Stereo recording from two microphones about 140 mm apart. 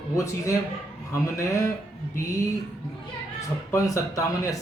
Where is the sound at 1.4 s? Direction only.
25° left (ahead or behind).